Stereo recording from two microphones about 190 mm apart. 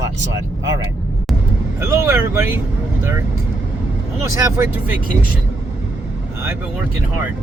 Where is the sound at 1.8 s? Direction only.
15° right (ahead or behind).